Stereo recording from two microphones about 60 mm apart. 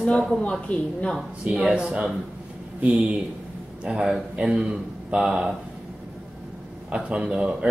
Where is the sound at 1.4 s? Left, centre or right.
Centre.